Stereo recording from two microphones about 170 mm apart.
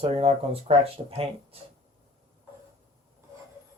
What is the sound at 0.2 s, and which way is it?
Speech, 35° right (ahead or behind).